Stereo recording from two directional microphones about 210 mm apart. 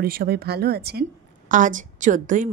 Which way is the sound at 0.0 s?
45° right (ahead or behind).